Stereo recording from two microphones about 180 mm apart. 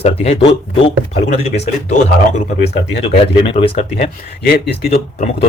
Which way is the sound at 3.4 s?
30° left (ahead or behind).